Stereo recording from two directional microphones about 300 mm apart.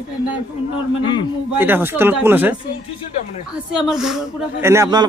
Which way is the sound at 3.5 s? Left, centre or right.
Centre.